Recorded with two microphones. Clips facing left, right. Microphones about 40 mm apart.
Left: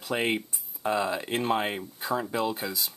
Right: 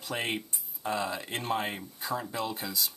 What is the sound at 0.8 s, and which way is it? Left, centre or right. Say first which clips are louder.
Speech: left 5 dB; left.